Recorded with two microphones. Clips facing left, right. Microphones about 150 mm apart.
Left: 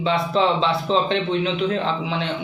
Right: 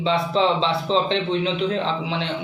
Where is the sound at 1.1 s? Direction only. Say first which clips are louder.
Left 1 dB; 30° right (ahead or behind).